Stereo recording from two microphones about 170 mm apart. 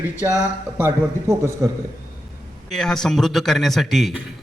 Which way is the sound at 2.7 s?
5° left (ahead or behind).